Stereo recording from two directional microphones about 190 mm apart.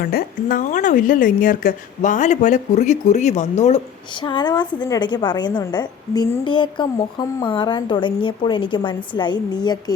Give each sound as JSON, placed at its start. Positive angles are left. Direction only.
{"t": 0.0, "sound": "speech", "side_deg": 50}
{"t": 4.2, "sound": "a woman's voice", "side_deg": 25}